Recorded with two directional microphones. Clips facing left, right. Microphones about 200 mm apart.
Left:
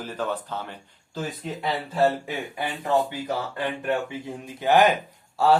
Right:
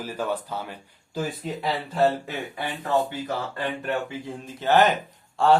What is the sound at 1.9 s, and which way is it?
Speech, 5° left (ahead or behind).